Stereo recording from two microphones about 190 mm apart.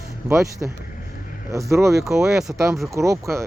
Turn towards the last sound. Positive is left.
turn(degrees=-15)  # may be behind; listen again after turning